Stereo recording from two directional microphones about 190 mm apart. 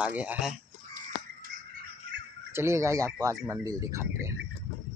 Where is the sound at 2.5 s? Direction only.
15° right (ahead or behind).